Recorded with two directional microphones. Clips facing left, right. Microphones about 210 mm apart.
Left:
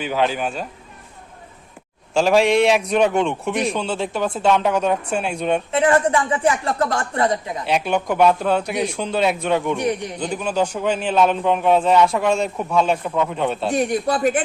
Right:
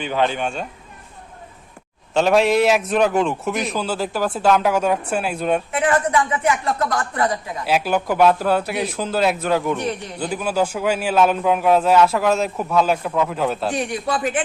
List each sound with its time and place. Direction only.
0.0 s a man's voice: 5° left (ahead or behind)
2.1 s a man's voice: centre (ahead or behind)
5.7 s a woman's voice: 30° left (ahead or behind)
7.6 s a man's voice: 5° right (ahead or behind)
9.7 s a man's voice: 15° left (ahead or behind)
10.2 s a man's voice: 5° right (ahead or behind)
13.7 s a man's voice: 40° left (ahead or behind)